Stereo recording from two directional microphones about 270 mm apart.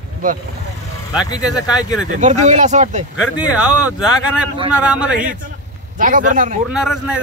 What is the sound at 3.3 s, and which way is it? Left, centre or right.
Speech, centre.